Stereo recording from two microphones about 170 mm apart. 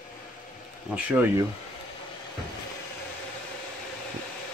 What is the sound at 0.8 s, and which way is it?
Speech, 10° right (ahead or behind).